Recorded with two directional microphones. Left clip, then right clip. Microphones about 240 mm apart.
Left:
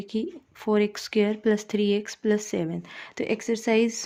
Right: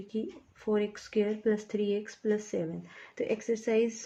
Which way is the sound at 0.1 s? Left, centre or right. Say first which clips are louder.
Left 5 dB; left.